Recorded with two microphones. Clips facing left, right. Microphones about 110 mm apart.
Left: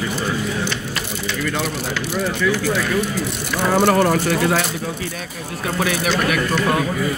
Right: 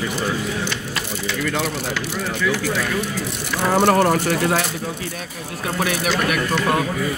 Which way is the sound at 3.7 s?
30° right (ahead or behind).